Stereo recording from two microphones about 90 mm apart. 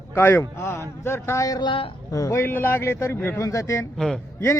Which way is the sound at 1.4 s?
45° left (ahead or behind).